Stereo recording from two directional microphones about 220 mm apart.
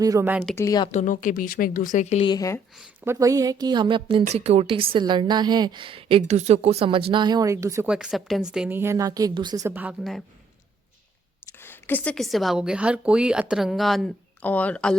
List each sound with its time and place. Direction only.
0.0 s a woman's voice: 15° right (ahead or behind)
0.4 s a woman's voice: 10° left (ahead or behind)
0.9 s speech: 35° left (ahead or behind)
2.3 s a woman's voice: 15° left (ahead or behind)
2.7 s a woman's voice: 5° right (ahead or behind)
11.5 s speech: 10° left (ahead or behind)